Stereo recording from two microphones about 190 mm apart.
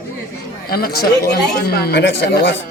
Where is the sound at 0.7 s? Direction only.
55° left (ahead or behind).